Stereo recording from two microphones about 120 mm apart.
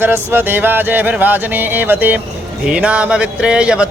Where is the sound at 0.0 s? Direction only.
15° right (ahead or behind).